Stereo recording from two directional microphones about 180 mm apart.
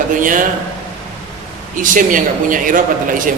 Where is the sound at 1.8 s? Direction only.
50° right (ahead or behind).